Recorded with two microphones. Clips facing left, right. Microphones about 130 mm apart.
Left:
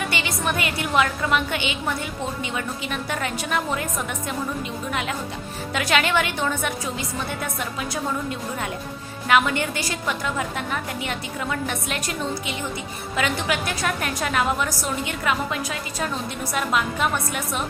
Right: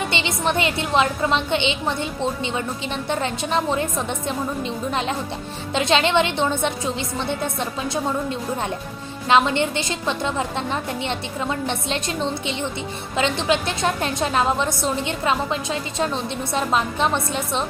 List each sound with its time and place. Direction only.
0.1 s a woman's voice: 25° right (ahead or behind)